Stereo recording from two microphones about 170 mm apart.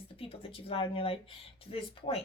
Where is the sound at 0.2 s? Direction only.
35° left (ahead or behind).